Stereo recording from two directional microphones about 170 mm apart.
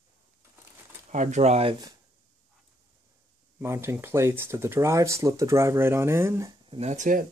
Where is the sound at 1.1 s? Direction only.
45° right (ahead or behind); by 2.0 s 25° right (ahead or behind).